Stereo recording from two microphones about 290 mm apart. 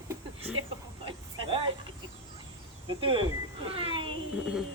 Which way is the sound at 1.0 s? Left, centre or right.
Centre.